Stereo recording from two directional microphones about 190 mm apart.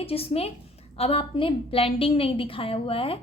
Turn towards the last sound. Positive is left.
turn(degrees=30)  # may be behind; listen again after turning